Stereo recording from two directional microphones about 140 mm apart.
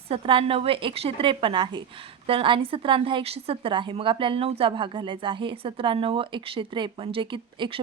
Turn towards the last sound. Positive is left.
turn(degrees=-35)  # may be behind; listen again after turning